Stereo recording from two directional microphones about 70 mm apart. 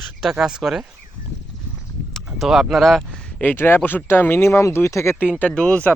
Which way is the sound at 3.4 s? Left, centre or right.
Left.